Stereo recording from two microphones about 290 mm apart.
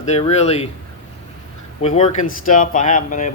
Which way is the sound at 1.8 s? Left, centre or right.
Left.